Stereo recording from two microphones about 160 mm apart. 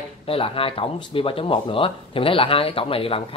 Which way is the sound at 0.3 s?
35° left (ahead or behind).